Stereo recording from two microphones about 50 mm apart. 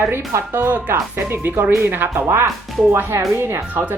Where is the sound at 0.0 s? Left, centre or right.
Right.